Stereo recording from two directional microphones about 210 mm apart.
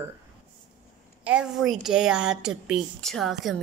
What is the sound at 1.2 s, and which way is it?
A woman's voice, 5° right (ahead or behind).